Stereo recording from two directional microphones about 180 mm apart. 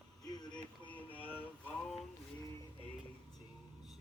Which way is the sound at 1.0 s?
10° left (ahead or behind).